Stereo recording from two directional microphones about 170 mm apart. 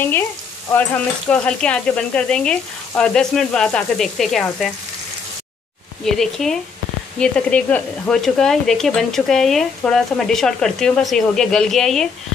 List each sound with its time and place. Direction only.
0.7 s speech: 10° left (ahead or behind)
6.0 s speech: centre (ahead or behind)